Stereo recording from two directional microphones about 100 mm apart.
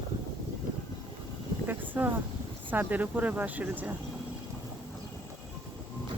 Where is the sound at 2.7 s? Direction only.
15° right (ahead or behind).